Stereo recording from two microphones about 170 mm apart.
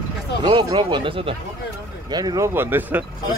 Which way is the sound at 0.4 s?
30° right (ahead or behind).